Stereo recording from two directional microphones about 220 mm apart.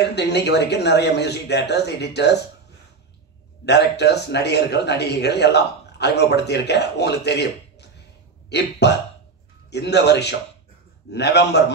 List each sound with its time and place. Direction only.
0.1 s a man's voice: 50° left (ahead or behind)
3.6 s a man's voice: 50° left (ahead or behind)
8.5 s a man's voice: 50° left (ahead or behind)